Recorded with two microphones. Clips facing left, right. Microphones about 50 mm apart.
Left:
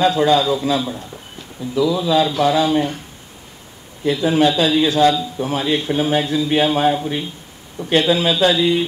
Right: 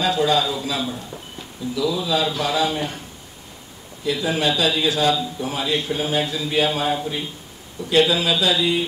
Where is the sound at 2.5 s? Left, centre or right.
Left.